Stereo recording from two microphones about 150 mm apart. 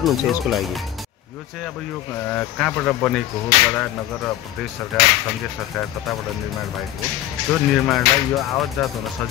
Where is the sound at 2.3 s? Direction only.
5° left (ahead or behind).